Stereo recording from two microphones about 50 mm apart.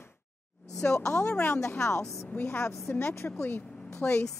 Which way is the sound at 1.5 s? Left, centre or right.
Left.